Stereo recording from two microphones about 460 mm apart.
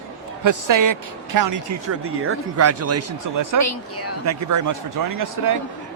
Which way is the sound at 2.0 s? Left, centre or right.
Right.